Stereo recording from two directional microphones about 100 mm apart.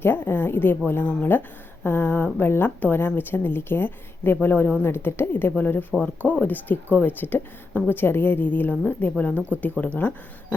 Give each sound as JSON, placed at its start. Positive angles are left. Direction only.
{"t": 0.0, "sound": "a woman's voice", "side_deg": 20}